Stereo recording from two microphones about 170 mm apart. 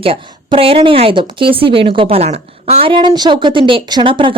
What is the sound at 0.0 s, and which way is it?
A woman's voice, 35° right (ahead or behind).